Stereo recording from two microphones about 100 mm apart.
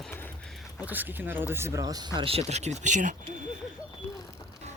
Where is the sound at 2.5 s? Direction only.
90° right.